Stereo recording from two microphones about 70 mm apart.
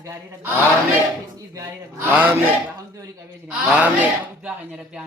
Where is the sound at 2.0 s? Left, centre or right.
Right.